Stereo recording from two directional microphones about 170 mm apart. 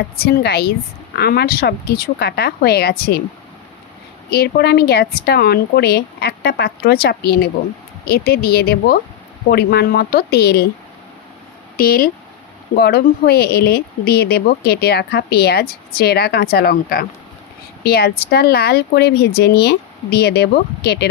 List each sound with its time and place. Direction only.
0.1 s speech: 65° left (ahead or behind)
4.3 s speech: 70° left (ahead or behind)
11.7 s speech: 60° left (ahead or behind)